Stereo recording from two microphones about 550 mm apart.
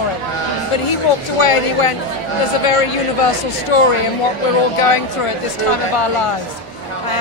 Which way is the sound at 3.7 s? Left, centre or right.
Left.